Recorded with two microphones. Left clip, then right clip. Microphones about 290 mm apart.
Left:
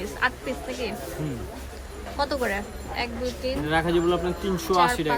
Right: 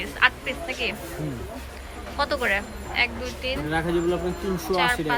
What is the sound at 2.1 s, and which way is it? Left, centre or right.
A woman's voice, centre.